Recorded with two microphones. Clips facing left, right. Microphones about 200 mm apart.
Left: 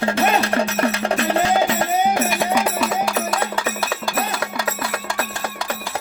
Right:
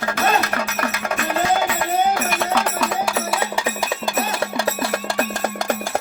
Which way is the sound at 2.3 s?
15° left (ahead or behind).